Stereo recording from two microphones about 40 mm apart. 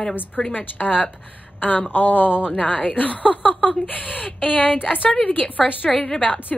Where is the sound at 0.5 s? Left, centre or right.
Left.